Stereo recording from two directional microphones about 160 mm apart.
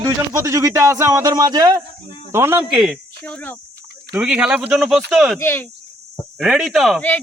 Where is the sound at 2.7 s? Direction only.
Centre (ahead or behind).